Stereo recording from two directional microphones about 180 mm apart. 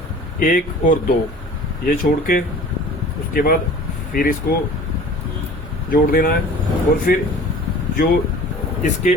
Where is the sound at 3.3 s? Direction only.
55° left (ahead or behind).